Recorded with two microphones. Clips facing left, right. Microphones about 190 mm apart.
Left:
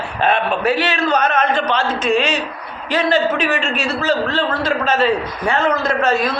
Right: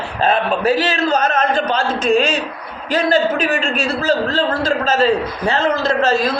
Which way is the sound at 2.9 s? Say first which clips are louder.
Right 1 dB; 50° right (ahead or behind).